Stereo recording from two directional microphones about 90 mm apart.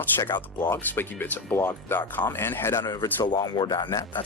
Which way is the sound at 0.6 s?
25° left (ahead or behind).